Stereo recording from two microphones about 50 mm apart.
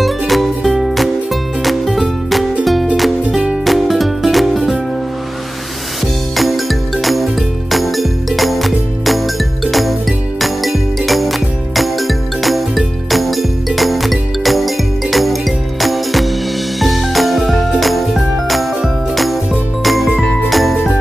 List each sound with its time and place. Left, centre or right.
0.0 s music: centre
3.3 s music: centre
3.6 s music: centre
6.3 s music: centre
20.2 s jingle bell: centre